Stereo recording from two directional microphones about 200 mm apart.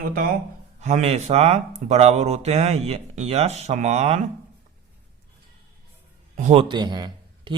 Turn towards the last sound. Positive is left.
turn(degrees=-20)  # may be behind; listen again after turning